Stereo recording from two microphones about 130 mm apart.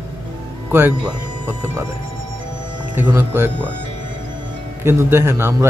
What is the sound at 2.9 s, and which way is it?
Speech, 20° right (ahead or behind).